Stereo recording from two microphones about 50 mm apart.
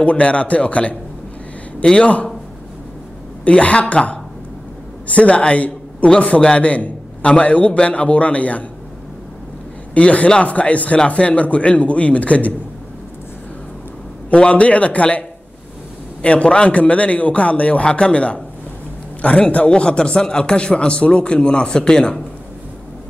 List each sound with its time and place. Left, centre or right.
0.0 s a man's voice: left
3.4 s a man's voice: left
9.9 s a man's voice: left
14.3 s a man's voice: left